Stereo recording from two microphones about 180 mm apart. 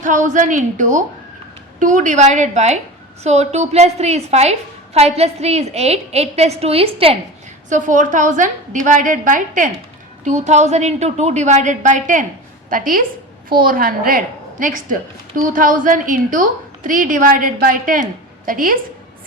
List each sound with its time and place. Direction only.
0.0 s a woman's voice: 45° right (ahead or behind)
7.7 s a woman's voice: 45° right (ahead or behind)